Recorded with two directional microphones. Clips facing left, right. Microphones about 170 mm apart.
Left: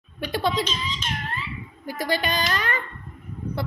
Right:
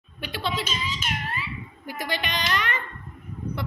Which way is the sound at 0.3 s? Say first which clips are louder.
Left 6 dB; 45° left (ahead or behind).